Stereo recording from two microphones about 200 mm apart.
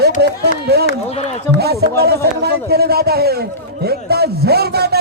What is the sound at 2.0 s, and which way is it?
A man's voice, 55° right (ahead or behind).